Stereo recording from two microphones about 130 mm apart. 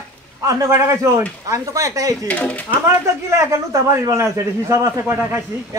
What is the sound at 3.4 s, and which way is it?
A man's voice, 25° right (ahead or behind).